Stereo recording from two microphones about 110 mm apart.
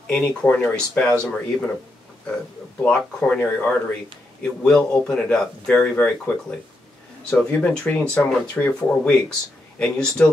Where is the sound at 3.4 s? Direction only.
15° left (ahead or behind).